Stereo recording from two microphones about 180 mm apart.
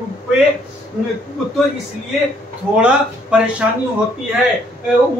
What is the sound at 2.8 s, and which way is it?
Speech, 5° right (ahead or behind).